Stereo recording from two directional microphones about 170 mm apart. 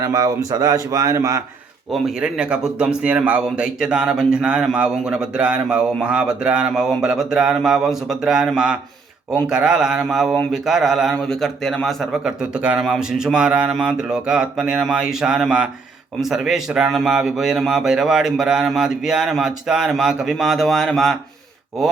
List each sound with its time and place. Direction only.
0.0 s a man's voice: 20° right (ahead or behind)
1.9 s a man's voice: 5° right (ahead or behind)